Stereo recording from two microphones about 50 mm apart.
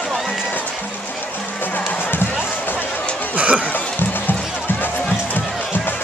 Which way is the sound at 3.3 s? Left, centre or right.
Right.